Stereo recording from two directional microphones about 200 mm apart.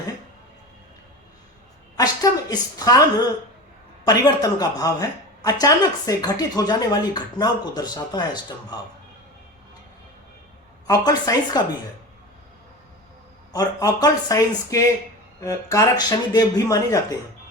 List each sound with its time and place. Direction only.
2.0 s a woman's voice: 20° left (ahead or behind)
4.0 s a woman's voice: 20° left (ahead or behind)
10.8 s a woman's voice: 20° left (ahead or behind)
13.5 s a woman's voice: 20° left (ahead or behind)